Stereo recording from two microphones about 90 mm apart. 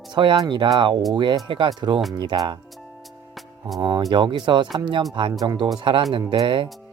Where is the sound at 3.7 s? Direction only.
50° right (ahead or behind).